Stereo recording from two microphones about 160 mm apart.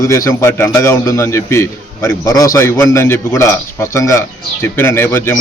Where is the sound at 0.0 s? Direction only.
20° left (ahead or behind).